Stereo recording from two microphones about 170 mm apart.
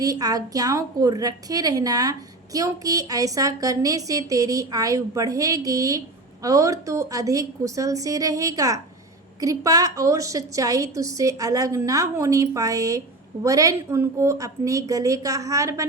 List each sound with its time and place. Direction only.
0.0 s a woman's voice: 20° right (ahead or behind)